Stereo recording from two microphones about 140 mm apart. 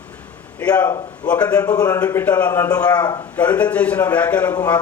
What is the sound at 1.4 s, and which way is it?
Speech, 25° left (ahead or behind).